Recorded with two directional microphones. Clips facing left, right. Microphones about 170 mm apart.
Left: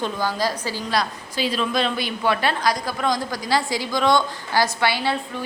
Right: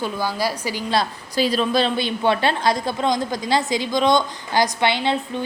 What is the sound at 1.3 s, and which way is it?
A woman's voice, 40° right (ahead or behind).